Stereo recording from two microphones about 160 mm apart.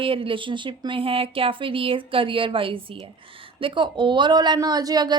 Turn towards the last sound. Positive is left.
turn(degrees=-25)  # may be behind; listen again after turning